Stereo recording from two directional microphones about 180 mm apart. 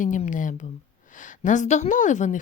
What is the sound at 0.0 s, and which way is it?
A woman's voice, 45° left (ahead or behind).